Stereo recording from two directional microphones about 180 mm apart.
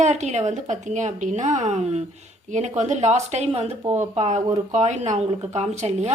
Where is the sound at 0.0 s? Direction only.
40° right (ahead or behind).